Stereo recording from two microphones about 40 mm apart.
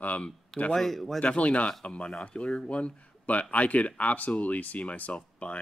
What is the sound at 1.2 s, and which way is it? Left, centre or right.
Speech, left.